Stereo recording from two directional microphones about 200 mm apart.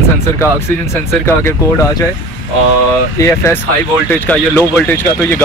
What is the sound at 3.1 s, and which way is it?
Speech, 15° left (ahead or behind).